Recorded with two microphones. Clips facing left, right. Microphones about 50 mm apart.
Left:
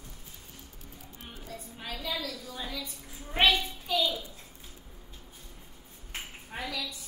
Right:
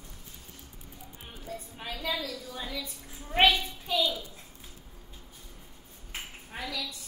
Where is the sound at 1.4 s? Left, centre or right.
Right.